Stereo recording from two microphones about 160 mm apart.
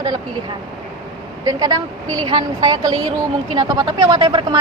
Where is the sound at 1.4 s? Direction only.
20° right (ahead or behind).